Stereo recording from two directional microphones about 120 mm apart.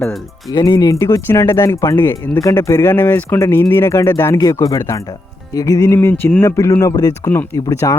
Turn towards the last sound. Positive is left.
turn(degrees=25)  # may be behind; listen again after turning